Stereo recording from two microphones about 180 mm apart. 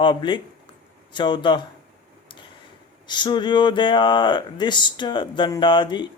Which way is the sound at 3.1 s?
25° left (ahead or behind).